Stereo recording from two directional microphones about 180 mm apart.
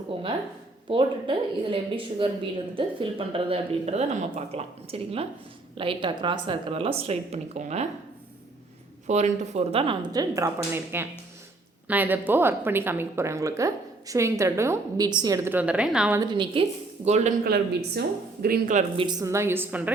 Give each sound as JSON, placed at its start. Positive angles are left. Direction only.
{"t": 0.9, "sound": "speech", "side_deg": -30}
{"t": 9.0, "sound": "a woman's voice", "side_deg": -40}
{"t": 16.2, "sound": "speech", "side_deg": -25}
{"t": 17.1, "sound": "speech", "side_deg": -40}
{"t": 17.4, "sound": "speech", "side_deg": -65}
{"t": 18.4, "sound": "speech", "side_deg": -55}
{"t": 18.9, "sound": "a woman's voice", "side_deg": -20}